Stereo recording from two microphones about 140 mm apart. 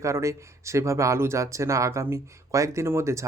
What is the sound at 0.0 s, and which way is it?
Speech, 20° right (ahead or behind).